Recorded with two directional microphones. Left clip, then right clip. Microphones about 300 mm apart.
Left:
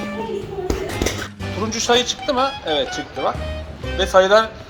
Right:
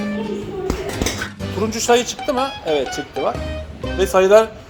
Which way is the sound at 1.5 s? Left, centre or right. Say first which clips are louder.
Right 1 dB; right.